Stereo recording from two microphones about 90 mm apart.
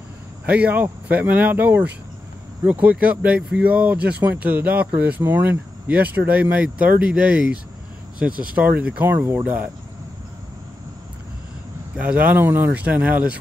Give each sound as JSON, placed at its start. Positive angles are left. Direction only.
{"t": 0.5, "sound": "speech", "side_deg": -15}
{"t": 12.0, "sound": "speech", "side_deg": -15}